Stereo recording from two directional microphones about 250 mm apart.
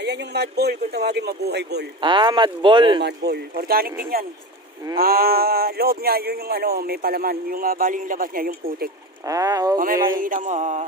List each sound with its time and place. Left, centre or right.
0.0 s speech: right
2.0 s speech: centre
3.0 s speech: right
9.2 s speech: centre
10.2 s speech: right